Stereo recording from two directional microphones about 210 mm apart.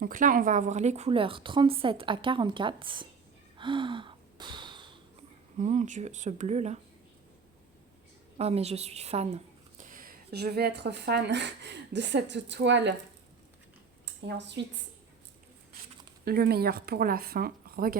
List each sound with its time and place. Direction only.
0.0 s speech: 40° right (ahead or behind); by 3.1 s 25° right (ahead or behind)
3.6 s gasp: 20° right (ahead or behind)
5.5 s speech: 35° right (ahead or behind)
8.4 s a woman's voice: 30° right (ahead or behind); by 12.9 s 55° right (ahead or behind)
14.0 s speech: 55° right (ahead or behind)
16.2 s speech: 45° right (ahead or behind)